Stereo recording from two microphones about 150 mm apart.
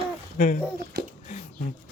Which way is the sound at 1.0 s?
90° right.